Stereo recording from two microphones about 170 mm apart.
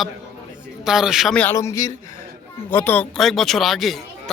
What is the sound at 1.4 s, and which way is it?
A man's voice, 15° left (ahead or behind).